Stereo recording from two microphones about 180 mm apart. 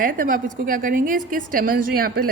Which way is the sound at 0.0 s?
50° right (ahead or behind).